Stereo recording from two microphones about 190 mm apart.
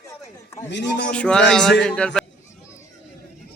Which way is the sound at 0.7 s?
65° left (ahead or behind).